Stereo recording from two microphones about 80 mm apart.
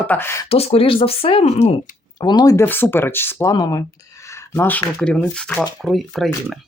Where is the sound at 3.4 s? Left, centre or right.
Left.